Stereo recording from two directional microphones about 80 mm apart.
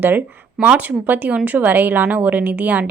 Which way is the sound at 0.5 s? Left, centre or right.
Centre.